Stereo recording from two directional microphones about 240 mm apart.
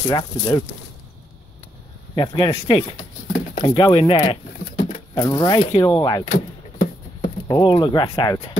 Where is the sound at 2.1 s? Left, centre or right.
Centre.